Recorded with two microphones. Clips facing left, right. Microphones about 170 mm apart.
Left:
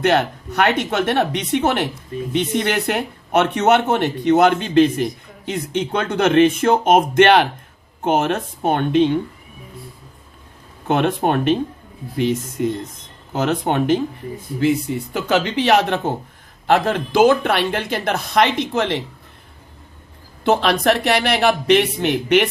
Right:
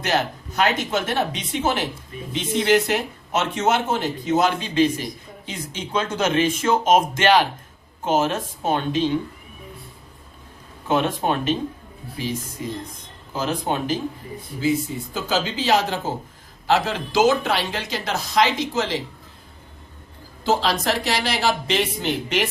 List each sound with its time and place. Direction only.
0.0 s speech: 60° left (ahead or behind)
10.8 s speech: 60° left (ahead or behind)
20.4 s speech: 60° left (ahead or behind)